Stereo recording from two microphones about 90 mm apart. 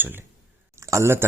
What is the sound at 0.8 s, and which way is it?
Speech, 30° right (ahead or behind).